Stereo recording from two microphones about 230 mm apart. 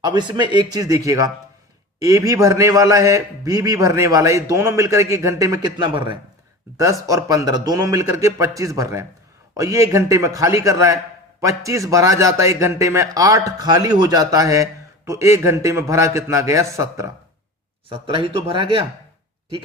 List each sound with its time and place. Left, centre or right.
0.0 s a man's voice: centre
17.8 s speech: right